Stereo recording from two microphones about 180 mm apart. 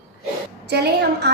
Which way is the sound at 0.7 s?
65° right (ahead or behind).